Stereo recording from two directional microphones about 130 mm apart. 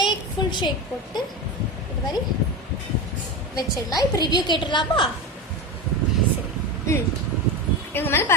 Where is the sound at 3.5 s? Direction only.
30° left (ahead or behind).